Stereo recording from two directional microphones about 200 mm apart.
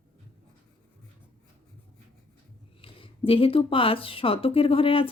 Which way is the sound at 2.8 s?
25° left (ahead or behind).